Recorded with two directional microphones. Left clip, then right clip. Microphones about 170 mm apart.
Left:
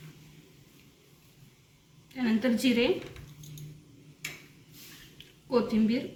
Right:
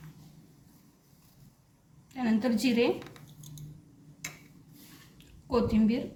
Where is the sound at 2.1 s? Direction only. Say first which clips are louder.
Left 1 dB; 50° right (ahead or behind).